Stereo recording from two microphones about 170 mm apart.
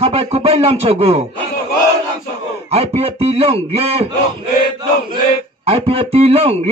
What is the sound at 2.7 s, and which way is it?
Speech, 35° right (ahead or behind).